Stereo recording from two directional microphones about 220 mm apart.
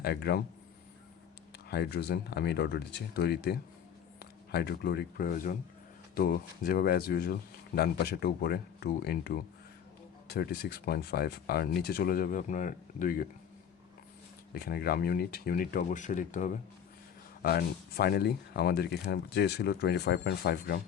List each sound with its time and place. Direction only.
0.0 s speech: 45° left (ahead or behind)
1.7 s speech: 50° left (ahead or behind)
14.5 s speech: 45° left (ahead or behind)